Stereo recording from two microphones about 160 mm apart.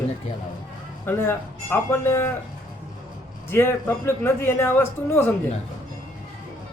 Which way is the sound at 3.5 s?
15° left (ahead or behind).